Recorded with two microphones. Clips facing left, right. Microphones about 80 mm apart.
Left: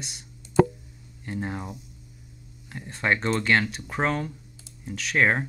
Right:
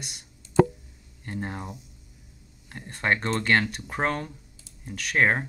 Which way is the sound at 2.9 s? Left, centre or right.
Centre.